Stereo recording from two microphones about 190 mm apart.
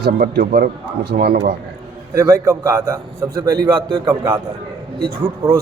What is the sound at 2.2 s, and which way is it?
A man's voice, 15° right (ahead or behind).